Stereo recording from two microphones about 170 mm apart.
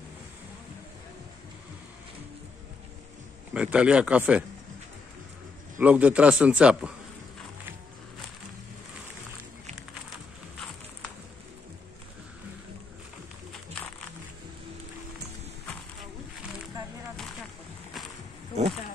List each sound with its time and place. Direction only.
3.5 s a man's voice: 5° right (ahead or behind)
5.8 s a man's voice: 10° right (ahead or behind)